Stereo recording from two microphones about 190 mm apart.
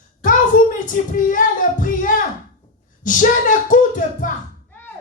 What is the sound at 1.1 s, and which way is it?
A woman's voice, 45° left (ahead or behind).